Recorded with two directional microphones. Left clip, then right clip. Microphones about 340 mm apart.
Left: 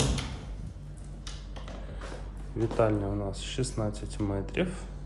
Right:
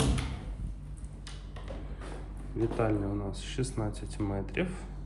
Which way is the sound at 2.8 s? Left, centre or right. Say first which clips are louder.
Left 7 dB; centre.